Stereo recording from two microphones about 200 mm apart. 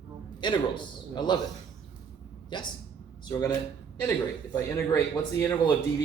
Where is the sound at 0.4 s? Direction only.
25° left (ahead or behind).